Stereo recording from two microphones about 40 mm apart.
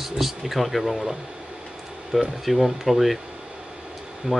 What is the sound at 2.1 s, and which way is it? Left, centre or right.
Speech, centre.